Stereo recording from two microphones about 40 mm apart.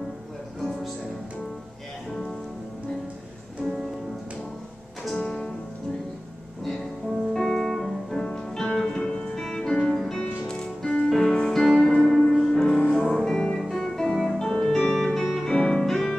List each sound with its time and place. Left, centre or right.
7.3 s music: centre
8.2 s music: centre
12.6 s music: left
13.1 s music: centre